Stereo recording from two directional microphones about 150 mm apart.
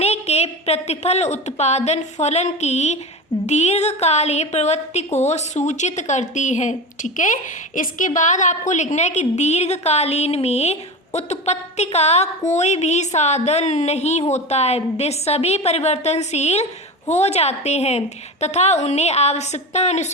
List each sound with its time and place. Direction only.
0.0 s a woman's voice: 45° left (ahead or behind)